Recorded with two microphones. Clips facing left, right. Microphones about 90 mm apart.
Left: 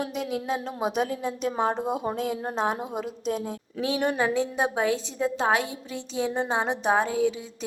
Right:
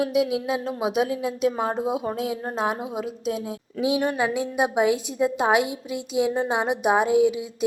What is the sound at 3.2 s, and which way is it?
A woman's voice, 5° right (ahead or behind).